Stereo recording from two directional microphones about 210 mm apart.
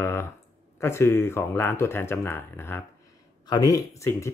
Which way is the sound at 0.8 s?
10° left (ahead or behind).